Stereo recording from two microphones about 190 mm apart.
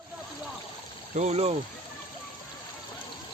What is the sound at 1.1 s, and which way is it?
Speech, 35° right (ahead or behind).